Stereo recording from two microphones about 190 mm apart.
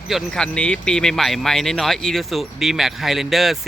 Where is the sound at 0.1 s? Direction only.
Centre (ahead or behind).